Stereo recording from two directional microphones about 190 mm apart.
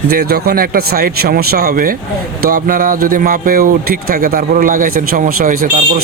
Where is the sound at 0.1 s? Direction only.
55° right (ahead or behind).